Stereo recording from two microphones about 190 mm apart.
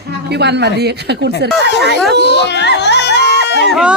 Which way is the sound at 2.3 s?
65° left (ahead or behind).